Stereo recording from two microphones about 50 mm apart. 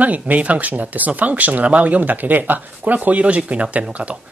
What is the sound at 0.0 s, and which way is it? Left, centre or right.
Speech, right.